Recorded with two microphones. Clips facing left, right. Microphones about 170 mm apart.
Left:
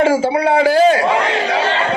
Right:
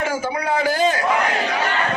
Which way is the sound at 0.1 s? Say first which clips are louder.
Left 9 dB; 30° left (ahead or behind).